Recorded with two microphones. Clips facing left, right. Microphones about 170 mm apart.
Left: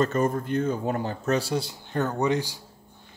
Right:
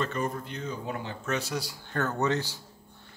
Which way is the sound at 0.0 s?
45° left (ahead or behind).